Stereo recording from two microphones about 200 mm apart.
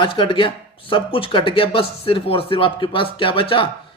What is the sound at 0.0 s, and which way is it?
Speech, 25° left (ahead or behind).